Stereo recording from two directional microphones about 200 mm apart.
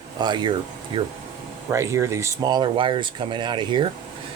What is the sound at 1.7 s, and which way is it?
Speech, 15° right (ahead or behind).